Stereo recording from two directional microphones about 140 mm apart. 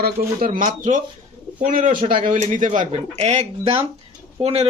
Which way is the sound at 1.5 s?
75° right (ahead or behind).